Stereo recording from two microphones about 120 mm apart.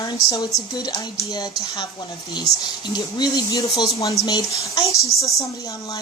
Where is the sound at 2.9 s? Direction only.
35° left (ahead or behind).